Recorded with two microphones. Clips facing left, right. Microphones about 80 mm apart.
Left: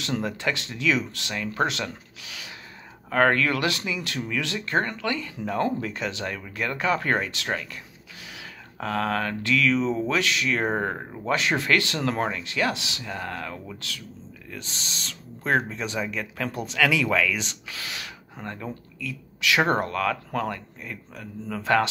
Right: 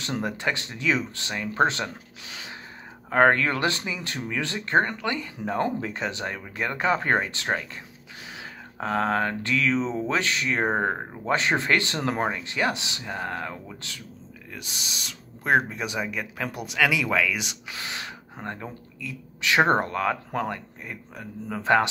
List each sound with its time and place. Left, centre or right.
0.0 s speech: right
14.5 s speech: centre